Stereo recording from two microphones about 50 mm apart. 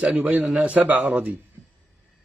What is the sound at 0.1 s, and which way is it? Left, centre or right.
Speech, right.